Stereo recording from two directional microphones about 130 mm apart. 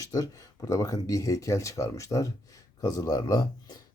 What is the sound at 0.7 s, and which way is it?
Speech, 25° left (ahead or behind).